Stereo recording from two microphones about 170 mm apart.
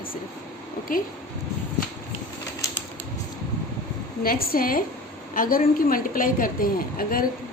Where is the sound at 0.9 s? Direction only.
55° left (ahead or behind).